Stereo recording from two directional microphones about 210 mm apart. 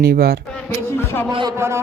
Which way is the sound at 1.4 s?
15° right (ahead or behind).